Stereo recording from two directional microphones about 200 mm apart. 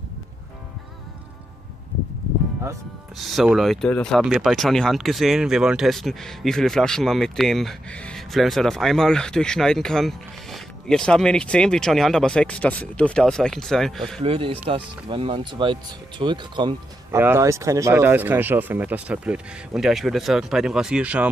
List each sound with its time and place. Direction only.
3.2 s speech: centre (ahead or behind)
14.2 s speech: 30° right (ahead or behind); by 21.3 s 5° right (ahead or behind)